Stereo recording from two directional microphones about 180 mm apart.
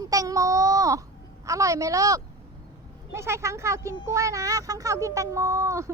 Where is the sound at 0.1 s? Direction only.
20° right (ahead or behind).